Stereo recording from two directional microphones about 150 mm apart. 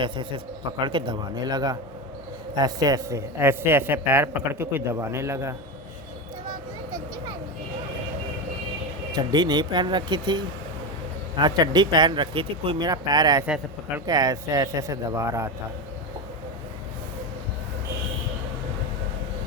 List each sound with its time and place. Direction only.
0.0 s a man's voice: 35° right (ahead or behind); by 5.5 s 20° right (ahead or behind)
9.1 s speech: 30° right (ahead or behind)
13.4 s a man's voice: 10° right (ahead or behind)
14.1 s speech: 25° right (ahead or behind)